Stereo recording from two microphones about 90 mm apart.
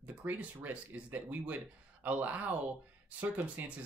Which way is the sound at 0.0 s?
20° right (ahead or behind).